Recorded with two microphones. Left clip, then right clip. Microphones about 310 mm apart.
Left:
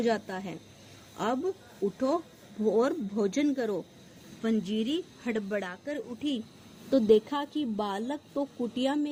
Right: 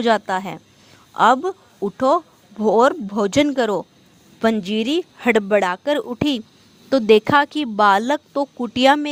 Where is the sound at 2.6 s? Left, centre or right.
Right.